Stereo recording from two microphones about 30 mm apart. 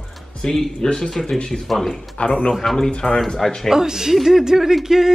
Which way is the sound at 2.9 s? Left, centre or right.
Left.